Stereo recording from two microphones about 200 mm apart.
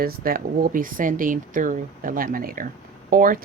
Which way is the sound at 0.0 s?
45° right (ahead or behind).